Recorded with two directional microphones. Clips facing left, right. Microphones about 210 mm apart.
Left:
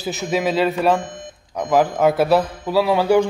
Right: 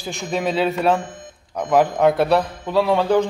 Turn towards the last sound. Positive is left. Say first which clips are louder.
# left 1 dB
turn(degrees=5)  # may be behind; listen again after turning